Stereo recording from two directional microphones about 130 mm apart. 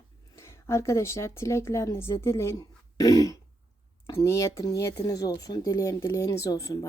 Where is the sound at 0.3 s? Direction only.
20° left (ahead or behind).